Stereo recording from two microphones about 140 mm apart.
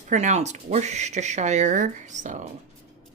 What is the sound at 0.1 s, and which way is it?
Speech, 60° right (ahead or behind).